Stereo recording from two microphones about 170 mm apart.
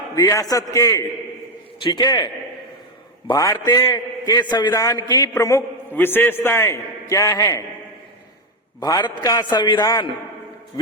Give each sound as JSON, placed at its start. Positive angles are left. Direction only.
{"t": 0.2, "sound": "a man's voice", "side_deg": 20}
{"t": 8.8, "sound": "a man's voice", "side_deg": 25}